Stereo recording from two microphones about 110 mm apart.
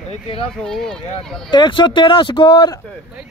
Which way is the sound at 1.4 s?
45° left (ahead or behind).